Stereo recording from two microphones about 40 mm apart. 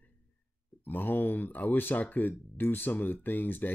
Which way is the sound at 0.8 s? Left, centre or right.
Left.